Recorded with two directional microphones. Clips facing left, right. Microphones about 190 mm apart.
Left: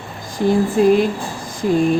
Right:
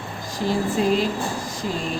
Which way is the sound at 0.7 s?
55° left (ahead or behind).